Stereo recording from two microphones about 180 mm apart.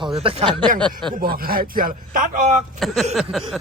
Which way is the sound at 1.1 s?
55° right (ahead or behind).